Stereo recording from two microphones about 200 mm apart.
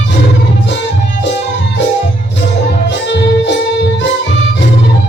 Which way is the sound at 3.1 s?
55° left (ahead or behind).